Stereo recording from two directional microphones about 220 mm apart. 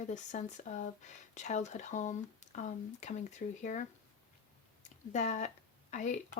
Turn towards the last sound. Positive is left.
turn(degrees=35)  # may be behind; listen again after turning